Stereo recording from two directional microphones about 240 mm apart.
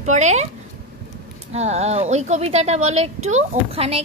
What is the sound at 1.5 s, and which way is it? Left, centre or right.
A woman's voice, right.